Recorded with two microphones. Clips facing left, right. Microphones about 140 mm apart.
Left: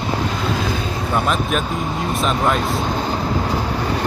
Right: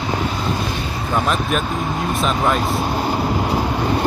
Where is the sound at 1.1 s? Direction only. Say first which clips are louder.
Even; centre (ahead or behind).